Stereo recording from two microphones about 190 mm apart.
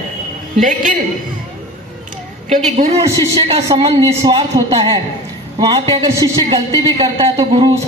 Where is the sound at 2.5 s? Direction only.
35° right (ahead or behind).